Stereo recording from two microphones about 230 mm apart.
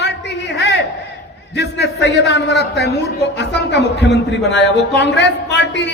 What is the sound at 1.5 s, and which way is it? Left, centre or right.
A man's voice, left.